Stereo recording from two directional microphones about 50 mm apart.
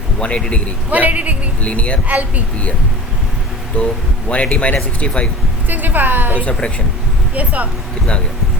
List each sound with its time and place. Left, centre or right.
0.2 s a man's voice: left
0.9 s a woman's voice: right
1.6 s a man's voice: left
2.0 s a woman's voice: right
3.7 s a man's voice: left
5.6 s a woman's voice: right